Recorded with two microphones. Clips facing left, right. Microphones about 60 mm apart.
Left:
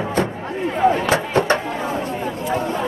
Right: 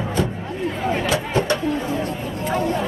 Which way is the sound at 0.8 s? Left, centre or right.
Left.